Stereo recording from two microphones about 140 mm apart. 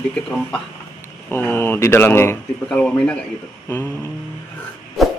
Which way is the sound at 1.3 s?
15° left (ahead or behind).